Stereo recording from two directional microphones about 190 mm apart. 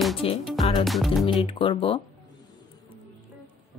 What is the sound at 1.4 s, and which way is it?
Speech, 30° left (ahead or behind).